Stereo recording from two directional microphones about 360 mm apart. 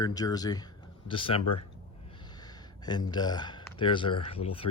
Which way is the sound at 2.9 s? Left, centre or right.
Centre.